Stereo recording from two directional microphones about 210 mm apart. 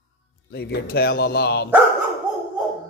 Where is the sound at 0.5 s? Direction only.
50° left (ahead or behind).